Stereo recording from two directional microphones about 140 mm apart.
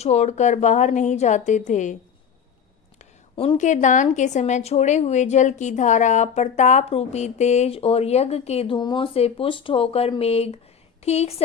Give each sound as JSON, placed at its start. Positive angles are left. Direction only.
{"t": 0.0, "sound": "a woman's voice", "side_deg": 50}
{"t": 3.3, "sound": "a woman's voice", "side_deg": 40}
{"t": 3.6, "sound": "a woman's voice", "side_deg": 60}